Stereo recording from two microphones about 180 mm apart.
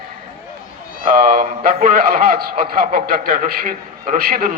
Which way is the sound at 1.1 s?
55° right (ahead or behind).